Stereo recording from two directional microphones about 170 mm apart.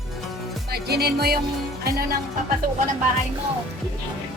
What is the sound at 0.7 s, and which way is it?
Music, 70° right (ahead or behind).